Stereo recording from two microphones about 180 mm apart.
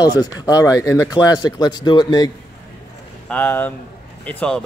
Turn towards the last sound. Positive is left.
turn(degrees=5)  # may be behind; listen again after turning